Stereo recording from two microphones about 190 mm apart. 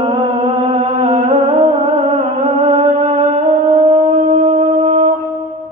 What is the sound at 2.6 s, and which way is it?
Music, 35° right (ahead or behind).